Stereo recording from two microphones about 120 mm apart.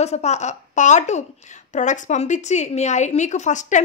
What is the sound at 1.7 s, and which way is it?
A woman's voice, 90° left.